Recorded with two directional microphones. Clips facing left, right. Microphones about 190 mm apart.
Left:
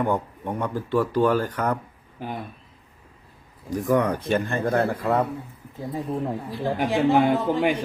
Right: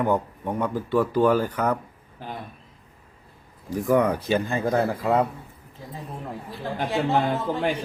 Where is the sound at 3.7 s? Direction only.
5° right (ahead or behind).